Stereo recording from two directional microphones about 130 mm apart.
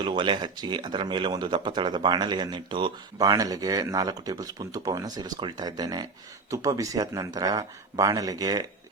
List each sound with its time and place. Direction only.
0.0 s speech: 40° right (ahead or behind)